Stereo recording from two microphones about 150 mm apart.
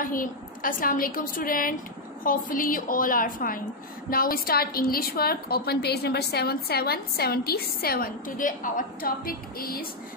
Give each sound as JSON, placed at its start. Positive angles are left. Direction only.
{"t": 0.0, "sound": "a woman's voice", "side_deg": 65}
{"t": 4.1, "sound": "a woman's voice", "side_deg": 75}